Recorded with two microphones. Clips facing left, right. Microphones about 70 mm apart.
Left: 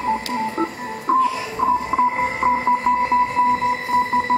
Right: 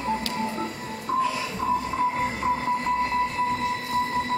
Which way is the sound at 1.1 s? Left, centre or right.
Left.